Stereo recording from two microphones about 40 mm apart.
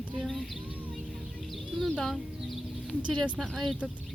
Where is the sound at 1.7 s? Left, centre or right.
Centre.